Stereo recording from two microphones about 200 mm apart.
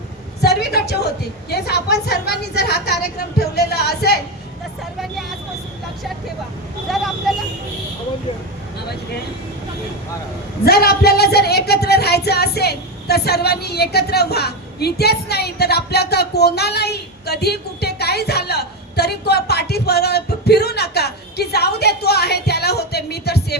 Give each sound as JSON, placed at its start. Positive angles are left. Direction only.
{"t": 0.4, "sound": "a woman's voice", "side_deg": 55}
{"t": 1.5, "sound": "child singing", "side_deg": 55}
{"t": 6.8, "sound": "speech", "side_deg": 0}
{"t": 10.7, "sound": "child singing", "side_deg": 50}